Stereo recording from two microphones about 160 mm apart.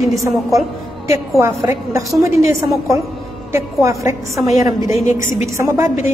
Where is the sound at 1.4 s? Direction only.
20° right (ahead or behind).